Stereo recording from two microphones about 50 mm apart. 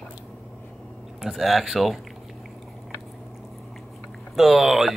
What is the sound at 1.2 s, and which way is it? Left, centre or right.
Speech, centre.